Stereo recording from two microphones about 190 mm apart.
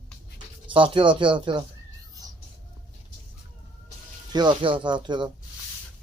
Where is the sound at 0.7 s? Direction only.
25° right (ahead or behind).